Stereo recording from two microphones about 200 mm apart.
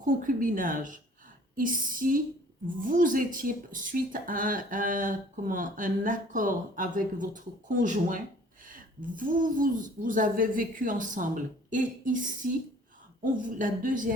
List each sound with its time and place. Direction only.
0.0 s speech: 40° right (ahead or behind)